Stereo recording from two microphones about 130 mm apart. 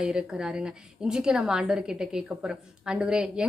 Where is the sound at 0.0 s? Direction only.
5° right (ahead or behind).